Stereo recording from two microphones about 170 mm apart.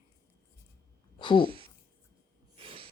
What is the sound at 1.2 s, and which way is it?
Speech, 25° left (ahead or behind).